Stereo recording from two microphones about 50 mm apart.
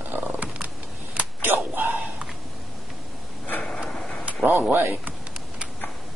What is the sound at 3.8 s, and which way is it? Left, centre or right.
Tick-tock, centre.